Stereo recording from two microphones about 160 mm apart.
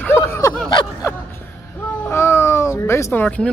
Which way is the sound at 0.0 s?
15° left (ahead or behind).